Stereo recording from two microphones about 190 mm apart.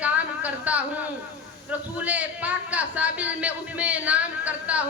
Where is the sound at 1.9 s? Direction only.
10° right (ahead or behind).